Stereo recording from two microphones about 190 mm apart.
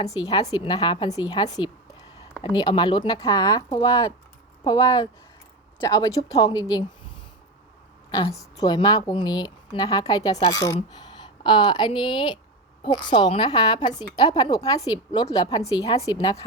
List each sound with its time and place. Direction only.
0.0 s a woman's voice: 20° left (ahead or behind)
8.1 s a woman's voice: 15° left (ahead or behind)